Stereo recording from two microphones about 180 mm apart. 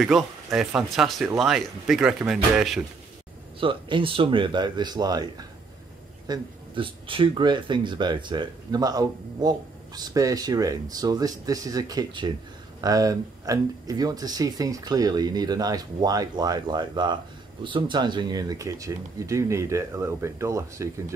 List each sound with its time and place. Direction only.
0.0 s speech: centre (ahead or behind)
3.5 s speech: 30° right (ahead or behind)